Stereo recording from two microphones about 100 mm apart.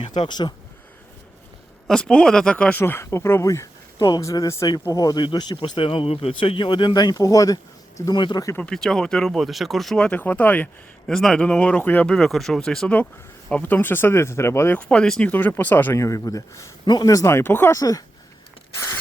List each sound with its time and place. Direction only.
0.1 s speech: 45° left (ahead or behind)
1.9 s speech: 5° left (ahead or behind)
2.8 s speech: 25° left (ahead or behind); by 5.5 s 45° left (ahead or behind)
5.5 s speech: 60° left (ahead or behind); by 8.1 s 35° left (ahead or behind)
8.1 s speech: 50° left (ahead or behind)
8.7 s speech: 5° left (ahead or behind)
10.1 s speech: 15° left (ahead or behind)
11.0 s speech: 5° left (ahead or behind)
13.5 s speech: 15° left (ahead or behind)
14.8 s speech: 10° left (ahead or behind); by 16.7 s 35° left (ahead or behind)
16.8 s speech: 45° left (ahead or behind); by 17.7 s 20° left (ahead or behind)
17.7 s speech: 35° left (ahead or behind)